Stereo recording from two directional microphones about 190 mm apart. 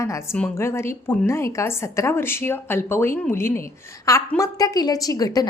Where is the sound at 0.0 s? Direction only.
15° left (ahead or behind).